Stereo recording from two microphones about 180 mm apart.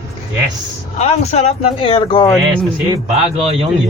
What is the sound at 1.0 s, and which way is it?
Speech, 35° left (ahead or behind).